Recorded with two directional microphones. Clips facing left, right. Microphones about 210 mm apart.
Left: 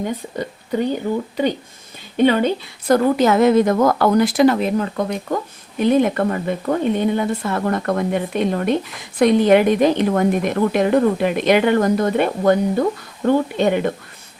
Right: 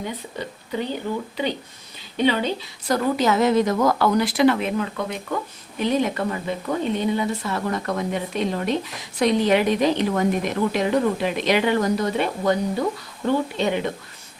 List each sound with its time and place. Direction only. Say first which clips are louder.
0.0 s a woman's voice: left 6 dB; 45° left (ahead or behind)
5.8 s a woman's voice: left 6 dB; 55° left (ahead or behind)